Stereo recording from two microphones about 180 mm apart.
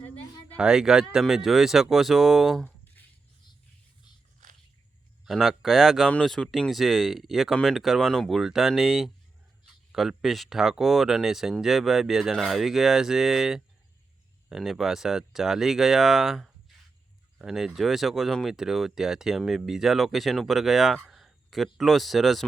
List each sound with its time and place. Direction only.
0.5 s speech: 5° right (ahead or behind)
4.4 s biting: 40° right (ahead or behind)
5.2 s speech: centre (ahead or behind)